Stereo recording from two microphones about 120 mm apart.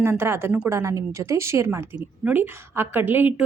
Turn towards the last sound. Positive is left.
turn(degrees=-15)  # may be behind; listen again after turning